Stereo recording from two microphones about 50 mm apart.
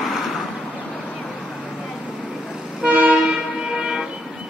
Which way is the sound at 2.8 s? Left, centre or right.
Right.